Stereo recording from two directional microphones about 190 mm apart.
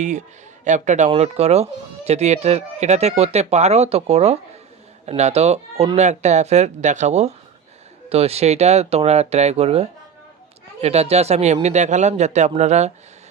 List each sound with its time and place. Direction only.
0.0 s speech: 40° right (ahead or behind)